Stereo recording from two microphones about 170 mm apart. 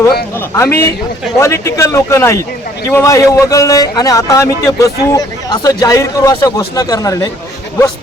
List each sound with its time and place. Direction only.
0.5 s a man's voice: 15° left (ahead or behind)